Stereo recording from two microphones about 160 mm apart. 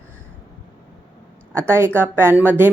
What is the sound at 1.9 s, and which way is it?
Speech, 15° right (ahead or behind).